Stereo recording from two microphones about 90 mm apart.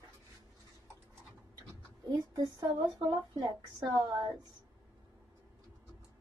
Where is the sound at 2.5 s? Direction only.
45° right (ahead or behind).